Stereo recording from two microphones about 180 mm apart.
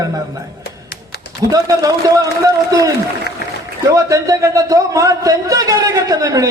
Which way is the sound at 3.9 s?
20° right (ahead or behind).